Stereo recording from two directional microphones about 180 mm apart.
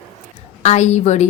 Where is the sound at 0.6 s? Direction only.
40° left (ahead or behind).